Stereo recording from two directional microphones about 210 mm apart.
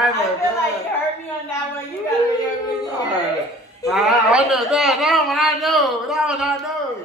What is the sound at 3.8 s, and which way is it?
A man's voice, centre (ahead or behind).